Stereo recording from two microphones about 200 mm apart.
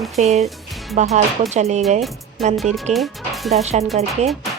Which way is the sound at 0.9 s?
35° right (ahead or behind).